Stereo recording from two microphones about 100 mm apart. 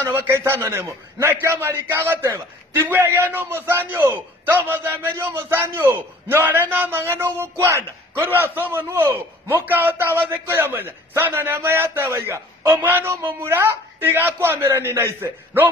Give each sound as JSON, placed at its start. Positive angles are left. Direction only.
{"t": 0.0, "sound": "a man's voice", "side_deg": -25}